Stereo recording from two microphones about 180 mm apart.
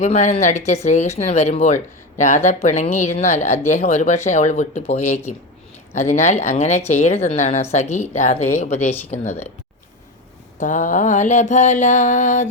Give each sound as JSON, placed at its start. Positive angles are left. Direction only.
{"t": 0.0, "sound": "speech", "side_deg": 40}
{"t": 10.6, "sound": "mantra", "side_deg": 45}